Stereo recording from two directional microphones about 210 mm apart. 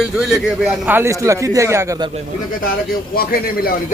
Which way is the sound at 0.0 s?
5° right (ahead or behind).